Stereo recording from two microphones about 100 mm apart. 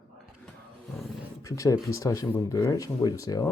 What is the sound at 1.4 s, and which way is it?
Speech, 35° left (ahead or behind).